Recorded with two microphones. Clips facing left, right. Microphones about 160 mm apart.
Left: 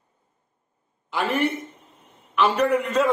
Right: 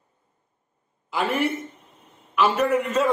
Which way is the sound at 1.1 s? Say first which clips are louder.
Even; centre (ahead or behind).